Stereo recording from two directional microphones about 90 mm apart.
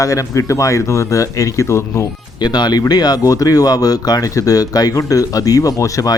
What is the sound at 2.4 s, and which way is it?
Speech, 50° left (ahead or behind).